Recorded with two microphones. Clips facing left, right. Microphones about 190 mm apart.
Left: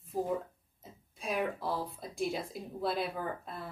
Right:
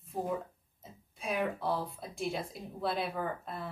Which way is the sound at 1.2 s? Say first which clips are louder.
Right 1 dB; centre (ahead or behind).